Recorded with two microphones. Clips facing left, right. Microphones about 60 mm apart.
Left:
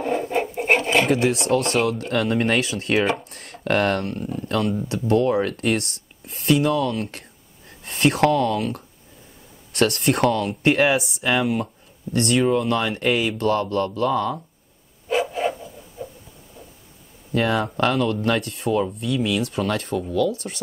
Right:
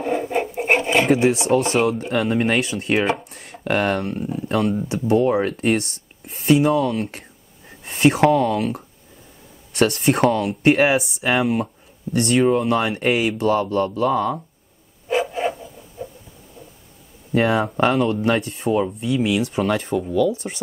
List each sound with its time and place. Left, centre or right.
0.0 s filing: centre
0.7 s speech: centre
15.1 s a sound: centre
16.0 s heart murmur: centre
17.3 s speech: centre